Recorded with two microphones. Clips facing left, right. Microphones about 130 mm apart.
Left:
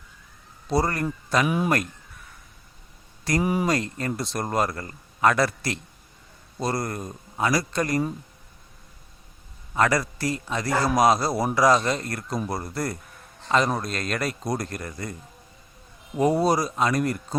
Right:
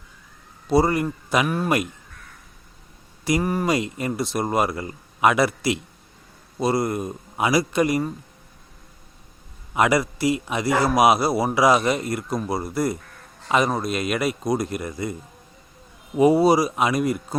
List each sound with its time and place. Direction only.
0.7 s a man's voice: 5° right (ahead or behind)
1.5 s speech: 10° left (ahead or behind)
3.4 s speech: 5° left (ahead or behind)
3.7 s a man's voice: 10° right (ahead or behind)
9.7 s a man's voice: 10° right (ahead or behind)
16.1 s speech: 5° right (ahead or behind)